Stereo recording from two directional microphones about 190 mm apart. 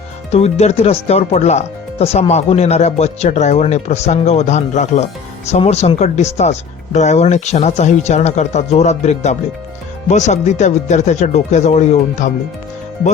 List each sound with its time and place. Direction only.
0.3 s speech: 35° left (ahead or behind)